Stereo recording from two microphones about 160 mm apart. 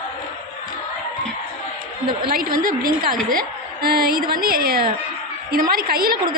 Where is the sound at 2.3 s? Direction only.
60° right (ahead or behind).